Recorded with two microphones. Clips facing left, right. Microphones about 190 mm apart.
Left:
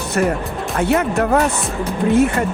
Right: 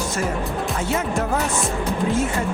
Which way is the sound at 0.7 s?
65° left (ahead or behind).